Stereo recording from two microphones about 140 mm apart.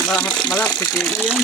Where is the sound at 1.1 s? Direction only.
5° right (ahead or behind).